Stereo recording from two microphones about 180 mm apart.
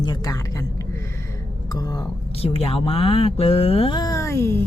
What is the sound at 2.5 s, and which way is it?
A woman's voice, 30° left (ahead or behind).